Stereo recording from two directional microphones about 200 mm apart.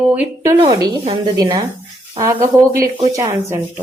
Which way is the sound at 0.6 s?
20° right (ahead or behind).